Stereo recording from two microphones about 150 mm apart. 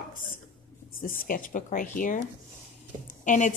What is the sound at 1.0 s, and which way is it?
A woman's voice, 65° left (ahead or behind).